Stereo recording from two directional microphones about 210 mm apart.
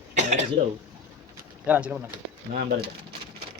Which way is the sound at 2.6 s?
45° right (ahead or behind).